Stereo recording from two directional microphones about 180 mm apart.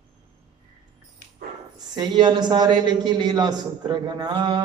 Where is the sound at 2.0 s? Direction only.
25° right (ahead or behind).